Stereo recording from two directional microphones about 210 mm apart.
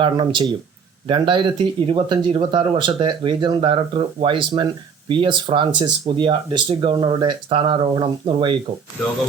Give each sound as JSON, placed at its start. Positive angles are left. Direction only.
{"t": 0.0, "sound": "speech", "side_deg": -25}